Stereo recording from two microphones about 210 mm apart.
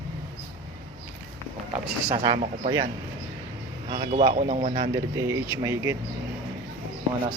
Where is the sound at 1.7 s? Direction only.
25° right (ahead or behind).